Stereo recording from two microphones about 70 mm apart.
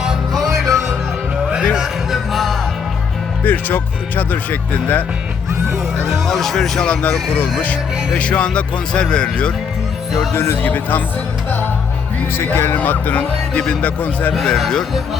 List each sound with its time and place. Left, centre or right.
0.0 s music: centre
3.4 s speech: left
6.1 s speech: centre
7.6 s speech: left
10.3 s speech: left
12.3 s speech: left
14.3 s speech: centre